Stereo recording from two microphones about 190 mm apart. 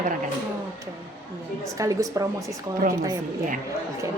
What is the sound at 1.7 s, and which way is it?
Speech, 15° right (ahead or behind).